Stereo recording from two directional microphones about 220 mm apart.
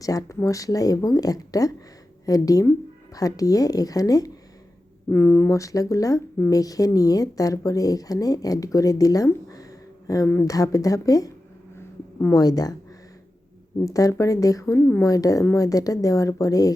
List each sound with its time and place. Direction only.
0.0 s speech: 15° left (ahead or behind)
11.8 s a sound: 15° left (ahead or behind)
13.8 s speech: 15° left (ahead or behind)